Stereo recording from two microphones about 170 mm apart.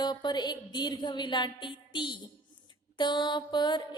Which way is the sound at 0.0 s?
25° left (ahead or behind).